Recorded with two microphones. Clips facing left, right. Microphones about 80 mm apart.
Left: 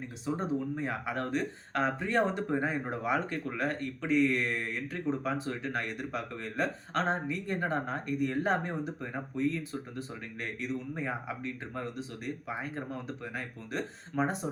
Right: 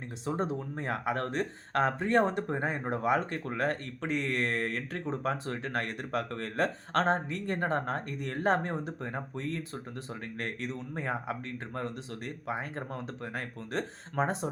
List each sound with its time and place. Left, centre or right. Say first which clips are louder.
0.4 s speech: left 2 dB; right
2.5 s speech: even; right
3.6 s speech: right 3 dB; right
5.2 s speech: even; right
14.1 s speech: even; right